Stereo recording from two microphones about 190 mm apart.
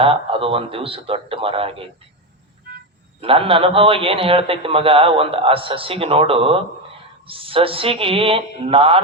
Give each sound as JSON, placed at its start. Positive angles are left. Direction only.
{"t": 0.0, "sound": "a man's voice", "side_deg": -30}
{"t": 3.2, "sound": "a man's voice", "side_deg": -30}